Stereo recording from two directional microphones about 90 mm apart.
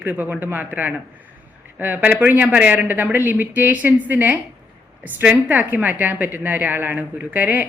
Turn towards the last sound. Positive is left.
turn(degrees=-20)  # may be behind; listen again after turning